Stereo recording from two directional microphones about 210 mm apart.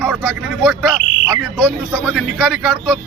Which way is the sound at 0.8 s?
15° right (ahead or behind).